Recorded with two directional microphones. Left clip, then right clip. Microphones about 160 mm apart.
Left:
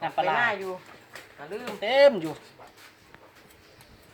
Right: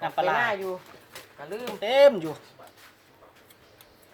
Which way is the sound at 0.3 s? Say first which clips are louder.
Even; 35° right (ahead or behind).